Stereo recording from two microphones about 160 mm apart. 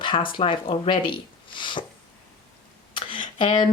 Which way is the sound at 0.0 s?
30° left (ahead or behind).